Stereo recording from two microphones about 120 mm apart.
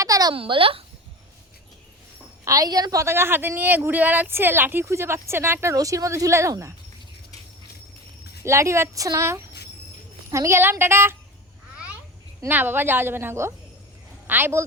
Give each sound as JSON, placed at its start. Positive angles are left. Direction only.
{"t": 0.0, "sound": "a sound", "side_deg": -30}
{"t": 0.3, "sound": "a child's voice", "side_deg": -45}
{"t": 2.4, "sound": "a woman's voice", "side_deg": -30}
{"t": 8.4, "sound": "a woman's voice", "side_deg": -25}
{"t": 12.5, "sound": "a woman's voice", "side_deg": -15}